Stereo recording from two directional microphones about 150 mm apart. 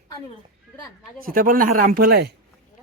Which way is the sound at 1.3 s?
70° right (ahead or behind).